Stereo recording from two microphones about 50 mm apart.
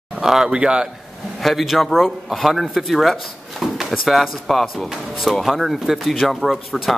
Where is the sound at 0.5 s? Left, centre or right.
Centre.